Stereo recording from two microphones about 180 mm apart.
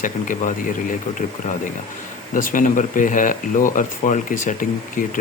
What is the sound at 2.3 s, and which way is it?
Speech, 50° left (ahead or behind).